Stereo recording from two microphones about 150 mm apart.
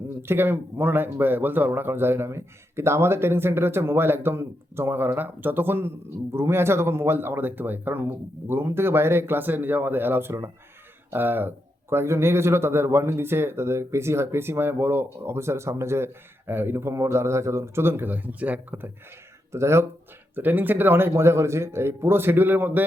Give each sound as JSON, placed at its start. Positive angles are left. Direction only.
{"t": 0.2, "sound": "speech", "side_deg": -15}